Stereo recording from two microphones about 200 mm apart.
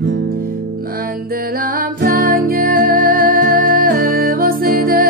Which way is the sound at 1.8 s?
45° right (ahead or behind).